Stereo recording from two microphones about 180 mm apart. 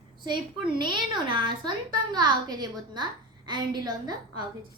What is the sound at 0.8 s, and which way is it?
A woman's voice, 25° right (ahead or behind).